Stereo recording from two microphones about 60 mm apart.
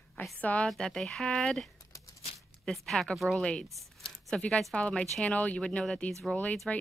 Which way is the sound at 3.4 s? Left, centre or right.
Centre.